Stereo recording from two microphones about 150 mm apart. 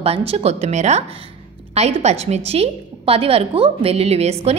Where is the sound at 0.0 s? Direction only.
40° right (ahead or behind).